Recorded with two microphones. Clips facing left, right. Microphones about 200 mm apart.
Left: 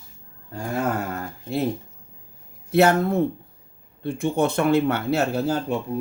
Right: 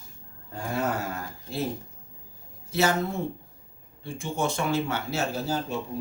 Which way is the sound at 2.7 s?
60° left (ahead or behind).